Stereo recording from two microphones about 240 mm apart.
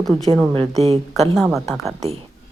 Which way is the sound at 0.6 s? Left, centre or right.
Right.